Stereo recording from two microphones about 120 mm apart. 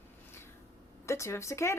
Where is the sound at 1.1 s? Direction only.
25° left (ahead or behind).